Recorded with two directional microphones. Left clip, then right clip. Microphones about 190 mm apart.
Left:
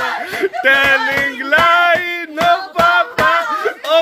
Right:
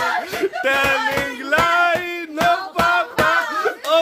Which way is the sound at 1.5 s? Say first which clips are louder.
Left 5 dB; 5° left (ahead or behind).